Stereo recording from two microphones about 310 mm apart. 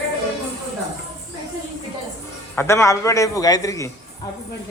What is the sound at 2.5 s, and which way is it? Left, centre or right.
A man's voice, centre.